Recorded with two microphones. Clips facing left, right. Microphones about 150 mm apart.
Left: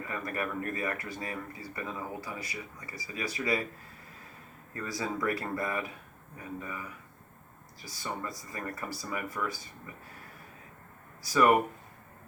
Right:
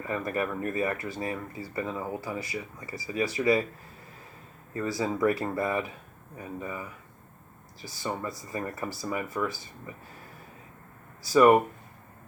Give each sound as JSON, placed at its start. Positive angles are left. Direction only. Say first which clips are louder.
{"t": 0.1, "sound": "speech", "louder": "right 6 dB", "side_deg": -25}
{"t": 4.7, "sound": "speech", "louder": "right 5 dB", "side_deg": -25}
{"t": 11.2, "sound": "speech", "louder": "right 5 dB", "side_deg": -25}